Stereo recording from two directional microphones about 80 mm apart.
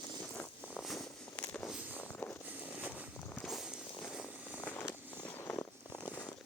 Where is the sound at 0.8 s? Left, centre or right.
Centre.